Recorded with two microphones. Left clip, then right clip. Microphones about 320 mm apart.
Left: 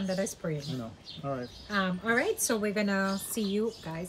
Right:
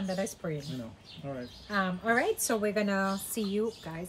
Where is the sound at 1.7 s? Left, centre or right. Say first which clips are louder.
Even; centre.